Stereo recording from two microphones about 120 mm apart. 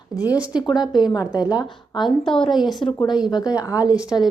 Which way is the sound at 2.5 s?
Centre (ahead or behind).